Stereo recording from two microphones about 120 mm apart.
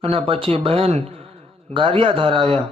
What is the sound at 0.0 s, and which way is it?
A man's voice, 50° right (ahead or behind).